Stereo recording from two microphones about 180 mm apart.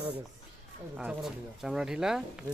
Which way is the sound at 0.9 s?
5° right (ahead or behind).